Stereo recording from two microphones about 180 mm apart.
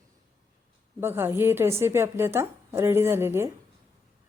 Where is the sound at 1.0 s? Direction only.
10° right (ahead or behind).